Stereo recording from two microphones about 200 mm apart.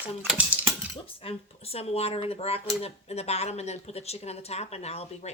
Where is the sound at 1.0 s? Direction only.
30° left (ahead or behind).